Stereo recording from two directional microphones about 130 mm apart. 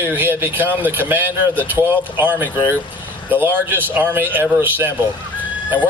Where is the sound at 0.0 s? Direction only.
15° right (ahead or behind).